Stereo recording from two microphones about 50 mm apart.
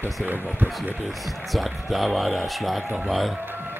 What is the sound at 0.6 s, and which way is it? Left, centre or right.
Speech, right.